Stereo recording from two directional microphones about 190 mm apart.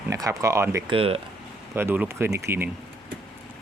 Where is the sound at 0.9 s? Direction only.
30° right (ahead or behind).